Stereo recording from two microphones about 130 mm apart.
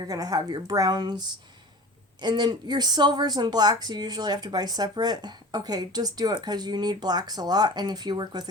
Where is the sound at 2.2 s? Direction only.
35° right (ahead or behind).